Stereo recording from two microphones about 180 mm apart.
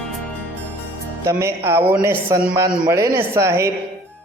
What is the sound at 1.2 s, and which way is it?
A man's voice, 15° right (ahead or behind).